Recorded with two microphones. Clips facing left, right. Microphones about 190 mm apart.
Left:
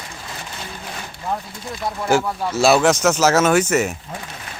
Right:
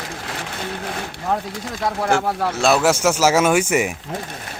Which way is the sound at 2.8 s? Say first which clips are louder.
Left 1 dB; 10° right (ahead or behind).